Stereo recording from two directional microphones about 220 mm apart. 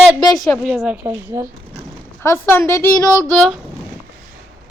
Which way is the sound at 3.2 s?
Centre (ahead or behind).